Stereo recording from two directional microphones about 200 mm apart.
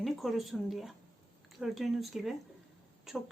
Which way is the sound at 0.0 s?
Centre (ahead or behind).